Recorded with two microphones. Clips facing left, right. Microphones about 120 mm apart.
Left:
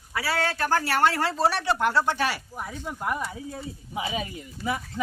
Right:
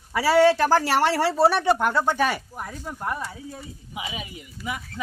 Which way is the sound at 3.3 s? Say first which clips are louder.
Left 2 dB; 30° left (ahead or behind).